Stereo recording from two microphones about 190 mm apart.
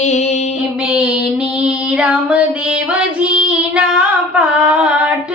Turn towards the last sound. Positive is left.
turn(degrees=-5)  # may be behind; listen again after turning